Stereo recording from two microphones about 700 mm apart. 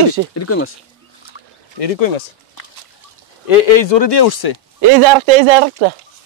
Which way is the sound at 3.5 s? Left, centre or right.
Left.